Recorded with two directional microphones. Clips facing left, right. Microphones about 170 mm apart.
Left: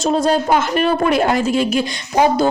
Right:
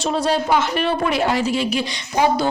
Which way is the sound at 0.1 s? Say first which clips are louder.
Left 3 dB; 45° left (ahead or behind).